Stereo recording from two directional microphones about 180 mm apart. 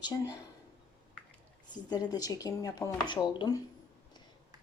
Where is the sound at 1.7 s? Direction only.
20° left (ahead or behind).